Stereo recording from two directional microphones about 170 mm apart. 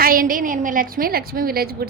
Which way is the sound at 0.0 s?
55° right (ahead or behind).